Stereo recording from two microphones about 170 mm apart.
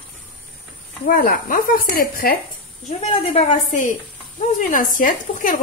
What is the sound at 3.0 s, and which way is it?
Speech, 40° left (ahead or behind).